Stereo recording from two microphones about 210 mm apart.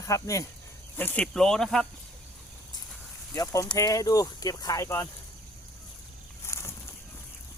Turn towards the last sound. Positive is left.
turn(degrees=15)  # may be behind; listen again after turning